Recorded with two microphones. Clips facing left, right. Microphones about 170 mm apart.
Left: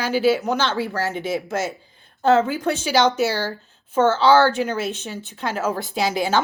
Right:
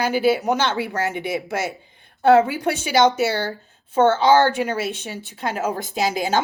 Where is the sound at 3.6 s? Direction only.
55° right (ahead or behind).